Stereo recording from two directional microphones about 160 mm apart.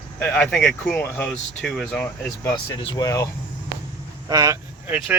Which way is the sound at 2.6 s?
30° left (ahead or behind).